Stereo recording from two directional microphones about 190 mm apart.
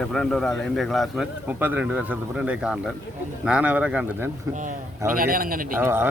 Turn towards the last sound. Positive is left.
turn(degrees=-10)  # may be behind; listen again after turning